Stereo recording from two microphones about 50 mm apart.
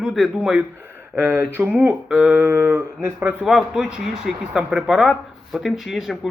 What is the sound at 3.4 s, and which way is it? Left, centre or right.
Speech, centre.